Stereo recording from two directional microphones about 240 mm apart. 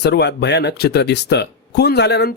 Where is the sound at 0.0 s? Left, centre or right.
Left.